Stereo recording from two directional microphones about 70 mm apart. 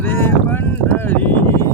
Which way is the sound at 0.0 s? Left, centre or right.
Left.